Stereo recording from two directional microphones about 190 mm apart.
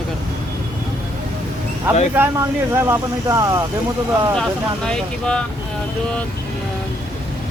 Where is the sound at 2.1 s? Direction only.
15° right (ahead or behind).